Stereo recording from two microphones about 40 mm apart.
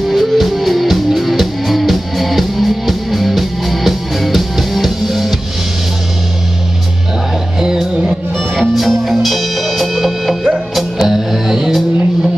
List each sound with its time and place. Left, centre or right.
0.1 s music: centre
7.6 s music: centre
8.7 s music: centre